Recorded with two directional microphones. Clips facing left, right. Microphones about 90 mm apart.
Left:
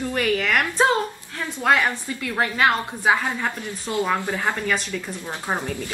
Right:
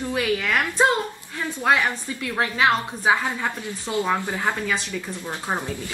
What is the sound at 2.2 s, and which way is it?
A woman's voice, 20° right (ahead or behind).